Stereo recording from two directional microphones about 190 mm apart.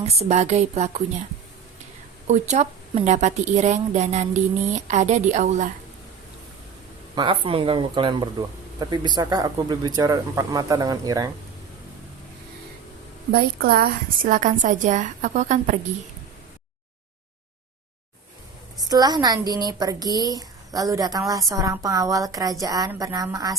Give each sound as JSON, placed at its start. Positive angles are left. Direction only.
{"t": 0.0, "sound": "a woman's voice", "side_deg": -35}
{"t": 2.2, "sound": "a woman's voice", "side_deg": -35}
{"t": 7.2, "sound": "speech", "side_deg": -25}
{"t": 13.3, "sound": "a woman's voice", "side_deg": -50}
{"t": 18.9, "sound": "speech", "side_deg": -20}